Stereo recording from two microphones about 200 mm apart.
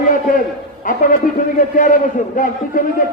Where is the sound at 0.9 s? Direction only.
40° left (ahead or behind).